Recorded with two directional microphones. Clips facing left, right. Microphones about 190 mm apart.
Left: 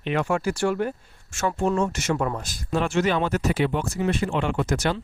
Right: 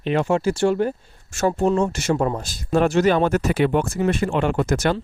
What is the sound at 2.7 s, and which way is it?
Speech, 40° right (ahead or behind).